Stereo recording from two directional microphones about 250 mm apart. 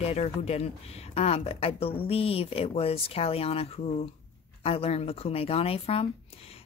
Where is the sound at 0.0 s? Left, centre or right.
Left.